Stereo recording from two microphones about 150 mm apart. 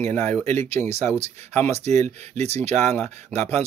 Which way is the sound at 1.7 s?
45° right (ahead or behind).